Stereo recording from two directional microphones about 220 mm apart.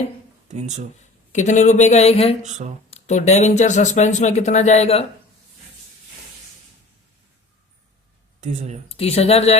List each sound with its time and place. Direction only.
0.4 s speech: 30° right (ahead or behind)
1.3 s speech: 35° left (ahead or behind)
2.4 s speech: 30° right (ahead or behind)
2.9 s speech: 30° left (ahead or behind)
8.4 s speech: 30° right (ahead or behind)
8.9 s speech: 25° left (ahead or behind)